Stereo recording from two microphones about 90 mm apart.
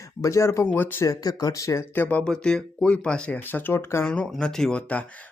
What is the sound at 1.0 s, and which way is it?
Speech, 40° left (ahead or behind).